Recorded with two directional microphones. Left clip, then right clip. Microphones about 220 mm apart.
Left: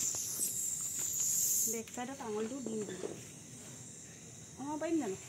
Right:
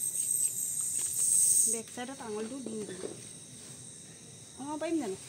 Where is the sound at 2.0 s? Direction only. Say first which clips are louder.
Right 2 dB; 5° left (ahead or behind).